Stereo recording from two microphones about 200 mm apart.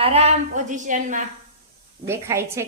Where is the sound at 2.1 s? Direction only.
15° right (ahead or behind).